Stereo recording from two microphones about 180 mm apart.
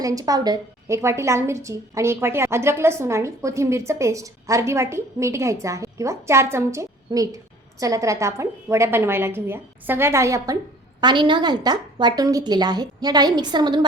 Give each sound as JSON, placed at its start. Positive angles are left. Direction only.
{"t": 0.0, "sound": "a woman's voice", "side_deg": -20}